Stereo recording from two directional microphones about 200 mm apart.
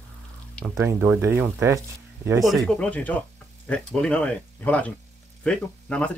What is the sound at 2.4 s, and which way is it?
Speech, centre (ahead or behind).